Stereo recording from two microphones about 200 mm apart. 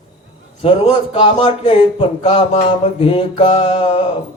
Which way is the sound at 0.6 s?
30° left (ahead or behind).